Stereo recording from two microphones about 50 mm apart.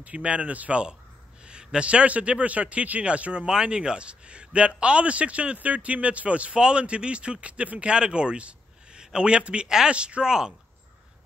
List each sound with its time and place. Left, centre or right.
0.0 s a man's voice: right